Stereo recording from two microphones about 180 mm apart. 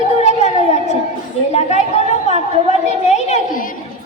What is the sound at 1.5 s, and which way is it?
Chatter, 40° left (ahead or behind).